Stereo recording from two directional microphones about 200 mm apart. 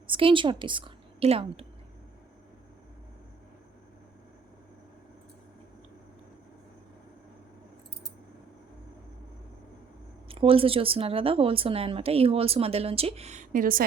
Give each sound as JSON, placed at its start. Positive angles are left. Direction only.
{"t": 0.1, "sound": "a woman's voice", "side_deg": -25}
{"t": 10.2, "sound": "speech", "side_deg": -30}